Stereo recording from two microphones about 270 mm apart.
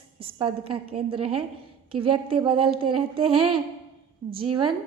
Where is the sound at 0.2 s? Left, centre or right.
Centre.